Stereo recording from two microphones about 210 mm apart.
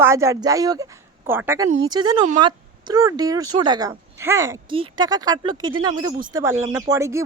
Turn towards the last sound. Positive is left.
turn(degrees=-15)  # may be behind; listen again after turning